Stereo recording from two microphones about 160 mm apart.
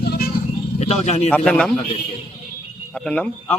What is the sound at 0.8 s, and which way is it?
Speech, 40° left (ahead or behind).